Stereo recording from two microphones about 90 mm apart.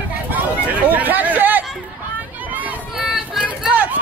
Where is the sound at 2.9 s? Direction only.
5° right (ahead or behind).